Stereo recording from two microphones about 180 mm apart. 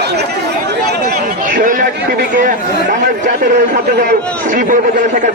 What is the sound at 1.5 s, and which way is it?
A man's voice, 50° right (ahead or behind).